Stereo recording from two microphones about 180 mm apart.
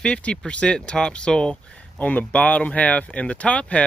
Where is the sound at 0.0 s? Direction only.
5° left (ahead or behind).